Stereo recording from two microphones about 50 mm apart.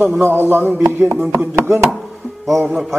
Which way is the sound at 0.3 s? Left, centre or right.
Right.